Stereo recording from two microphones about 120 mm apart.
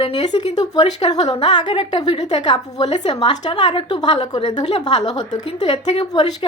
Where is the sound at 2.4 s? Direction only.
40° left (ahead or behind).